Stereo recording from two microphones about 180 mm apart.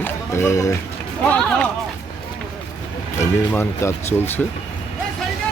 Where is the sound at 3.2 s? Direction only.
15° left (ahead or behind).